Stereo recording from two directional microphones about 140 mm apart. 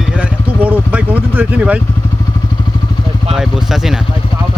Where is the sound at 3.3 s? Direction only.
5° right (ahead or behind).